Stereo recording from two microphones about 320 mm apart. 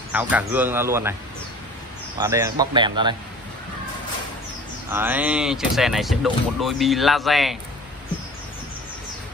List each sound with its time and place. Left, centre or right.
0.1 s speech: centre
2.1 s a man's voice: centre
4.9 s speech: centre